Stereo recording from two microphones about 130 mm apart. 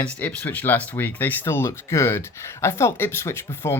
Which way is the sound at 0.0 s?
10° left (ahead or behind).